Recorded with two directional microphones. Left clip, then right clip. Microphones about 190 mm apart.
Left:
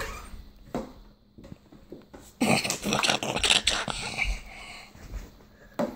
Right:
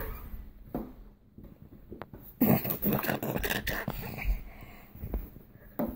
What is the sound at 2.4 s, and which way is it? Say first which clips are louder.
Dog: left 4 dB; 15° right (ahead or behind).